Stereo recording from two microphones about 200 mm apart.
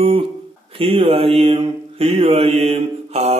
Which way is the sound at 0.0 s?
30° right (ahead or behind).